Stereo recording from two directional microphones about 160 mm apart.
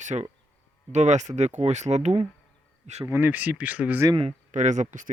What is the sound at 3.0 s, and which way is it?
Speech, 15° right (ahead or behind).